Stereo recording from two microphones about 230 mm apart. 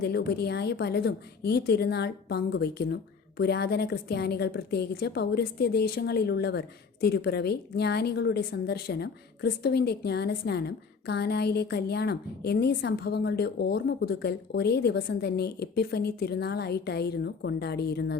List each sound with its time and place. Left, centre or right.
0.0 s a woman's voice: left